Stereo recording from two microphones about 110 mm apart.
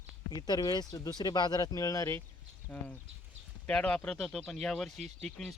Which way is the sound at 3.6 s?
10° left (ahead or behind).